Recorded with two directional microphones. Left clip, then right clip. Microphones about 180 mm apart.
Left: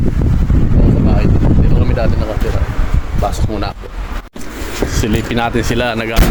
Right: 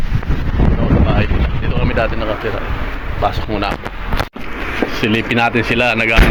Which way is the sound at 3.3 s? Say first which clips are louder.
Right 2 dB; 15° left (ahead or behind).